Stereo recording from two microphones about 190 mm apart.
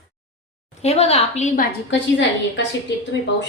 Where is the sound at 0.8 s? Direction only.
35° left (ahead or behind).